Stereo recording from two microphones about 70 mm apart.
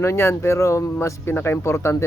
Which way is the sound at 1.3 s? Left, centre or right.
Left.